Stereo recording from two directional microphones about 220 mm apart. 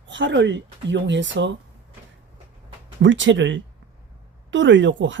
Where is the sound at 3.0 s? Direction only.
55° right (ahead or behind).